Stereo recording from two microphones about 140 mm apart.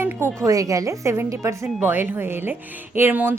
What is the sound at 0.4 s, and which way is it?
A woman's voice, 25° right (ahead or behind).